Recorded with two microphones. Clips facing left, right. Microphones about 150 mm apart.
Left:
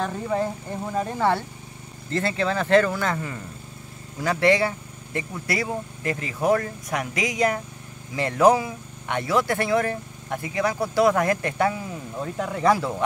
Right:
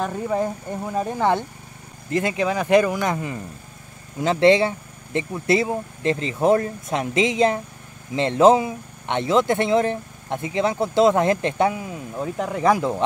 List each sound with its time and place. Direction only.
0.0 s speech: 15° right (ahead or behind)